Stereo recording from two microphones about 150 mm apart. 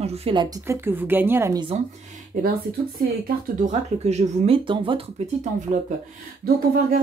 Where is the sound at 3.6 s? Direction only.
50° right (ahead or behind).